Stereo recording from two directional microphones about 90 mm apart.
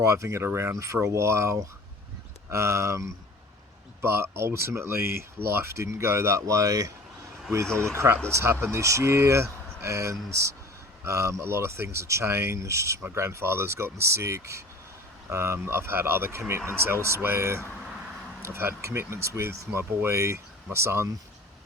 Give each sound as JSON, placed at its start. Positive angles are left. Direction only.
{"t": 0.0, "sound": "speech", "side_deg": -35}